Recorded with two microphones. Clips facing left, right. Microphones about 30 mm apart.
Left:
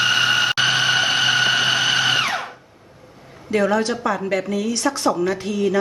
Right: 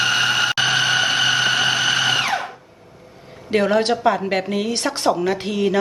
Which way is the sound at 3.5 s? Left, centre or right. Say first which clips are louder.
Right 2 dB; right.